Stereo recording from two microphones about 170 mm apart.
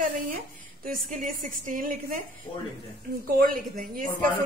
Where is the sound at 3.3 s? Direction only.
55° right (ahead or behind).